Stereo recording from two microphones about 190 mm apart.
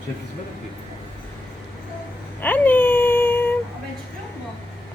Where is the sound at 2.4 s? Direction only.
10° left (ahead or behind).